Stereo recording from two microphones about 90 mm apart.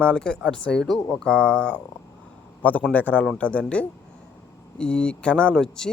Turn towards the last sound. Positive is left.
turn(degrees=5)  # may be behind; listen again after turning